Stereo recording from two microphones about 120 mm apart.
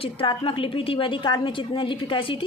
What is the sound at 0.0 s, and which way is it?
A woman's voice, 50° left (ahead or behind).